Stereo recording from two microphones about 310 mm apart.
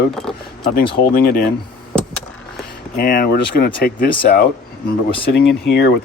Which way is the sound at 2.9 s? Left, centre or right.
Left.